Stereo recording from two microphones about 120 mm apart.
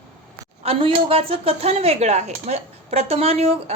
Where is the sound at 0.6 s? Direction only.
50° right (ahead or behind).